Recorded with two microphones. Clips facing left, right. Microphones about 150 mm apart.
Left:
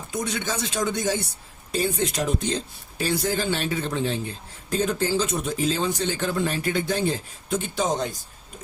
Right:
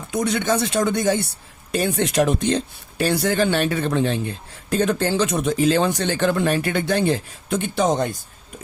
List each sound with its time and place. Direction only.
0.1 s speech: 65° right (ahead or behind)